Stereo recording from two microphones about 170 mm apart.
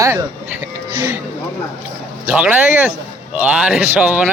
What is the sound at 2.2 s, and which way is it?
Speech, 10° right (ahead or behind).